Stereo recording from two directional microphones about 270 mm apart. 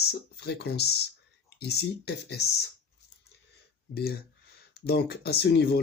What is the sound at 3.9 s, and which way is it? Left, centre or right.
Speech, left.